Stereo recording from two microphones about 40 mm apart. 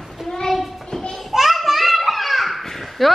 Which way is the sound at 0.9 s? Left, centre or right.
Centre.